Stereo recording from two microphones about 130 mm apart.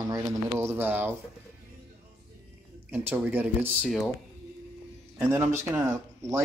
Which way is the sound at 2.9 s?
15° right (ahead or behind).